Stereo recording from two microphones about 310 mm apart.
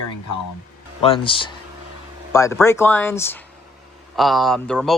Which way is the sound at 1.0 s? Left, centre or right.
Centre.